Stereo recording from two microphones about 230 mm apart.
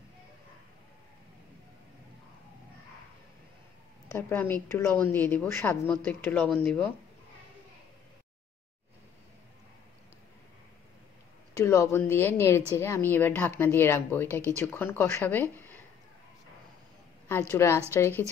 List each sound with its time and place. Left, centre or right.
4.1 s a woman's voice: centre
11.5 s a woman's voice: centre
17.3 s a woman's voice: centre